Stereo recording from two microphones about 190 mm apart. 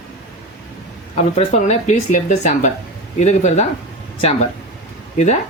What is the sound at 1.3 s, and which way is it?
Speech, 35° left (ahead or behind).